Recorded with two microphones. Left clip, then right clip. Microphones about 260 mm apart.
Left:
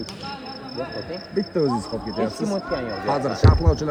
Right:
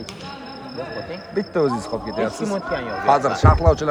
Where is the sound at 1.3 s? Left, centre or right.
Centre.